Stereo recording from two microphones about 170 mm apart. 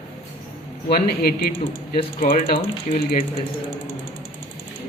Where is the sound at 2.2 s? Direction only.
50° left (ahead or behind).